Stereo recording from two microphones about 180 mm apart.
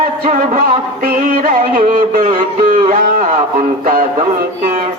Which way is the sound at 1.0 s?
50° right (ahead or behind).